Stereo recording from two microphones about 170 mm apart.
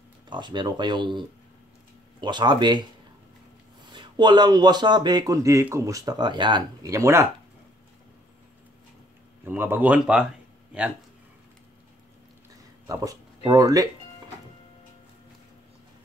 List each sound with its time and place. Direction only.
0.3 s speech: 25° right (ahead or behind)
3.9 s speech: 25° right (ahead or behind)
9.4 s speech: 10° right (ahead or behind)
12.8 s speech: 20° right (ahead or behind)